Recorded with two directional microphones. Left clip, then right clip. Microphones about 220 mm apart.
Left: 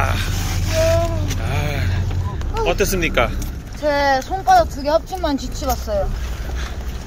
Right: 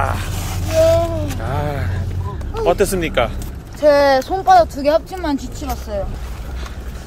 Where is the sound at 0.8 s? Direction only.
30° right (ahead or behind).